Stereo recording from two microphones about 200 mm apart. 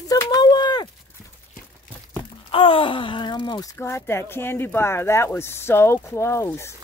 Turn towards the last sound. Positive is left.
turn(degrees=15)  # may be behind; listen again after turning